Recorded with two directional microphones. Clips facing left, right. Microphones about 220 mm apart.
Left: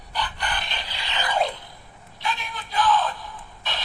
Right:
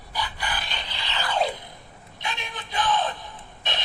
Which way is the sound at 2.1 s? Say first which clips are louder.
Left 3 dB; 20° right (ahead or behind).